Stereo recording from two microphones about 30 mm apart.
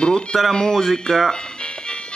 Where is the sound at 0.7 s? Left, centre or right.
Centre.